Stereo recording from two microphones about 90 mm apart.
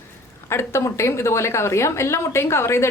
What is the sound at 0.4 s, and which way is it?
A woman's voice, 30° left (ahead or behind).